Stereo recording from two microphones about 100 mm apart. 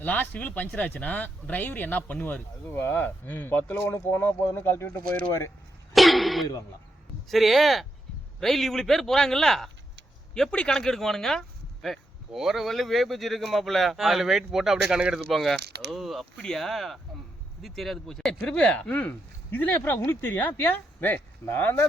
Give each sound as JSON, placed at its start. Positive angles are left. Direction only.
{"t": 0.0, "sound": "speech", "side_deg": 15}
{"t": 5.9, "sound": "speech", "side_deg": 0}